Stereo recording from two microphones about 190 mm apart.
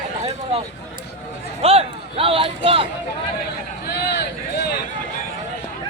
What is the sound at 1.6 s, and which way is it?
A man's voice, 30° right (ahead or behind).